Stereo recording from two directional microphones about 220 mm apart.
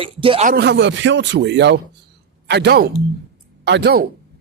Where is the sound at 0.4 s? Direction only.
50° right (ahead or behind).